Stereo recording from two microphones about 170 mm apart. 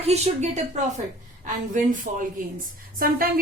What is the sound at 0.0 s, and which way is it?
Speech, 40° right (ahead or behind).